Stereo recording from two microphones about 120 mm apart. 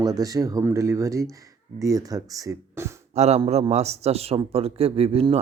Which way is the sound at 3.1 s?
65° right (ahead or behind).